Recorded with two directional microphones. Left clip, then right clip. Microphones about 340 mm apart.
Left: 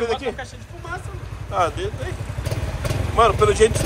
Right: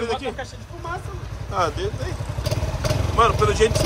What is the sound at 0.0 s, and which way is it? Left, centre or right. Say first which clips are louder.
Speech: left 2 dB; centre.